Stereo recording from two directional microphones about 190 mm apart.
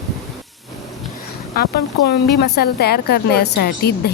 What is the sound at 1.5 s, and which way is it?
Speech, 55° left (ahead or behind).